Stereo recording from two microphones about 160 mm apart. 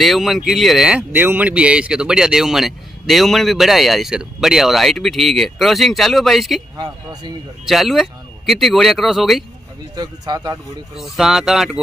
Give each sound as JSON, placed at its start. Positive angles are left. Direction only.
{"t": 0.0, "sound": "speech", "side_deg": 0}
{"t": 6.8, "sound": "a man's voice", "side_deg": -25}
{"t": 7.6, "sound": "speech", "side_deg": 0}
{"t": 9.9, "sound": "a man's voice", "side_deg": -25}
{"t": 11.0, "sound": "speech", "side_deg": 0}